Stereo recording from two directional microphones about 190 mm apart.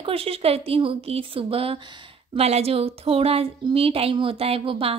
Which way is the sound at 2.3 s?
35° right (ahead or behind).